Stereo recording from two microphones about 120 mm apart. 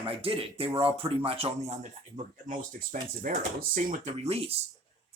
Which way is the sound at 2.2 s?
90° right.